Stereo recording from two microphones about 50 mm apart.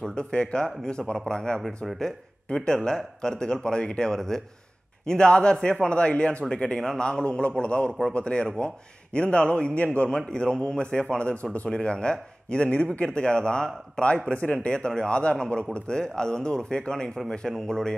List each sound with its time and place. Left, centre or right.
0.0 s a man's voice: centre
13.0 s a man's voice: centre